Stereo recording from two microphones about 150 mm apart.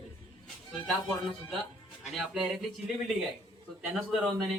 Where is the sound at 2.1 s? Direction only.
5° right (ahead or behind).